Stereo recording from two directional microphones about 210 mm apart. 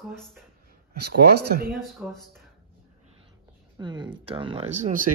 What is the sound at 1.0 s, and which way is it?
Speech, 50° right (ahead or behind).